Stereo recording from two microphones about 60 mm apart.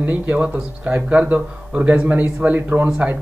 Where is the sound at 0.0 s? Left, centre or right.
Right.